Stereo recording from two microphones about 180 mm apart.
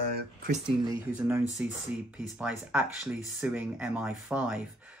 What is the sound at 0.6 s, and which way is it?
Speech, 25° right (ahead or behind).